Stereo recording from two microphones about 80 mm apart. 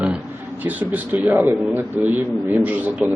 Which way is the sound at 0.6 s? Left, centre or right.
Right.